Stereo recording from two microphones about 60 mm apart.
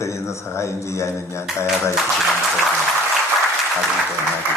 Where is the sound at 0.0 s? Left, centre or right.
Left.